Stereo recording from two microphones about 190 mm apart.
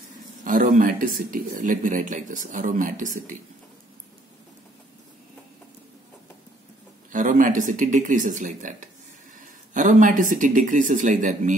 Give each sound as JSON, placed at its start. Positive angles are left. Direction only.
{"t": 0.4, "sound": "speech", "side_deg": -40}
{"t": 7.1, "sound": "speech", "side_deg": -45}